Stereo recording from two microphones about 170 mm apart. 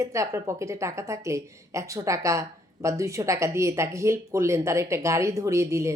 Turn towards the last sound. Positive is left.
turn(degrees=-15)  # may be behind; listen again after turning